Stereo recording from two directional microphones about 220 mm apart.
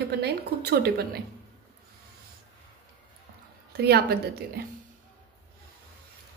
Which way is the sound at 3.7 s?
45° right (ahead or behind).